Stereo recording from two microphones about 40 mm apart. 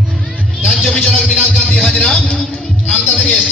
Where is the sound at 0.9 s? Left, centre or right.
Left.